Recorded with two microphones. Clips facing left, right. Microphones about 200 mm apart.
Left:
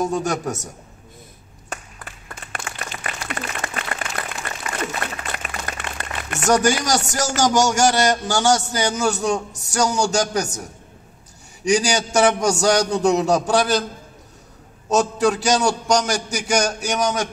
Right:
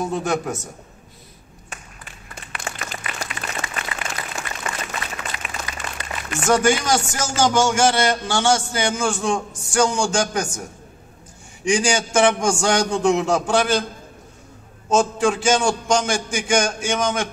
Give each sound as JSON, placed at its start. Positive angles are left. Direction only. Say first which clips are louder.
{"t": 0.1, "sound": "a woman's voice", "louder": "even", "side_deg": 45}
{"t": 2.7, "sound": "applause", "louder": "right 3 dB", "side_deg": -40}
{"t": 3.0, "sound": "applause", "louder": "left 2 dB", "side_deg": 55}
{"t": 4.5, "sound": "a sound", "louder": "left 3 dB", "side_deg": 55}
{"t": 7.1, "sound": "a man's voice", "louder": "left 1 dB", "side_deg": 40}
{"t": 11.6, "sound": "a man's voice", "louder": "left 1 dB", "side_deg": 40}
{"t": 14.9, "sound": "a man's voice", "louder": "even", "side_deg": 40}